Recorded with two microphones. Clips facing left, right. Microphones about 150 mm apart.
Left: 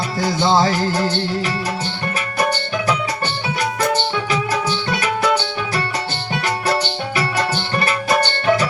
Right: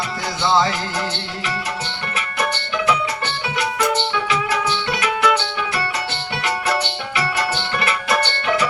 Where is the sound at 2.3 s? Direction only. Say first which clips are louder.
Left 2 dB; 40° left (ahead or behind).